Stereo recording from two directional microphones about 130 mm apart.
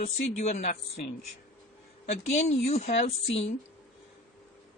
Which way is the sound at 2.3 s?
55° left (ahead or behind).